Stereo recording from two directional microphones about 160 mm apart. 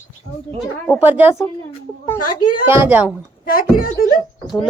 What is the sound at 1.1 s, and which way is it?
Speech, 10° right (ahead or behind).